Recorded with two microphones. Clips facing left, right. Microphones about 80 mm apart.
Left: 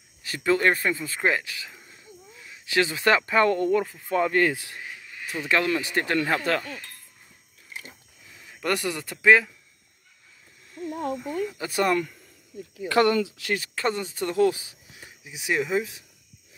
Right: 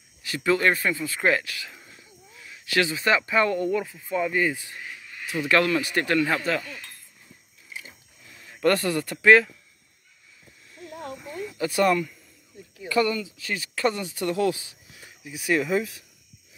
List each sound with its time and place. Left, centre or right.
0.2 s speech: left
1.9 s snake: left
2.9 s speech: left
4.1 s speech: left
5.5 s speech: left
6.3 s speech: left
8.6 s speech: centre
11.7 s speech: left
12.8 s speech: left
13.7 s speech: left